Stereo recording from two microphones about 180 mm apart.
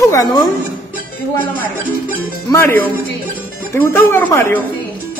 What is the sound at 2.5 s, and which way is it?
A woman's voice, 10° left (ahead or behind).